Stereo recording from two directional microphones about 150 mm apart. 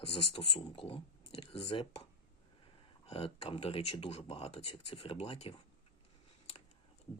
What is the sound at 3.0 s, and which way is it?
Speech, 40° left (ahead or behind).